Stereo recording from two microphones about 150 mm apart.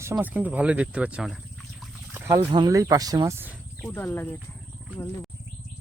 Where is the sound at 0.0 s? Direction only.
15° right (ahead or behind).